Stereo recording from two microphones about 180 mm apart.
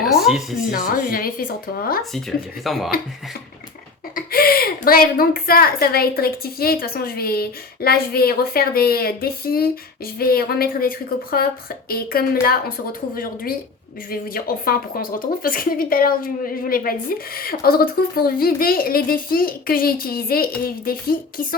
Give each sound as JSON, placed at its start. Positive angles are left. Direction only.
{"t": 0.0, "sound": "a sound", "side_deg": 0}
{"t": 0.7, "sound": "speech", "side_deg": 55}
{"t": 2.6, "sound": "speech", "side_deg": 0}
{"t": 4.1, "sound": "speech", "side_deg": 55}
{"t": 14.1, "sound": "speech", "side_deg": 55}